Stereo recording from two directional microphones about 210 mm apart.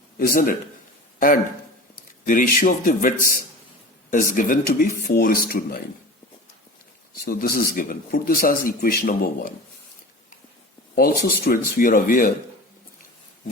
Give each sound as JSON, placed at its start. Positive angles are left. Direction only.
{"t": 0.2, "sound": "a man's voice", "side_deg": 40}
{"t": 2.2, "sound": "a man's voice", "side_deg": 40}
{"t": 7.3, "sound": "speech", "side_deg": 45}
{"t": 10.9, "sound": "speech", "side_deg": 45}